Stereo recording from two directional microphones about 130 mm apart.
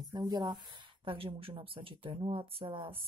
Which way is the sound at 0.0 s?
30° right (ahead or behind).